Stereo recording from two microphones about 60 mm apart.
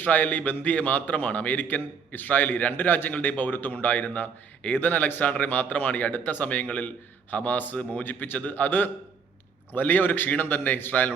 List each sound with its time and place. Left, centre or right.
0.0 s a man's voice: left